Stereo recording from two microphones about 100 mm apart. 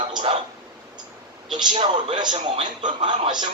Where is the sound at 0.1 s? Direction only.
55° right (ahead or behind).